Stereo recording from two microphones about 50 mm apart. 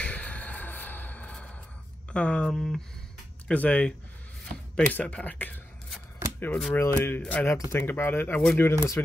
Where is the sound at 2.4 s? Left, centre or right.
Centre.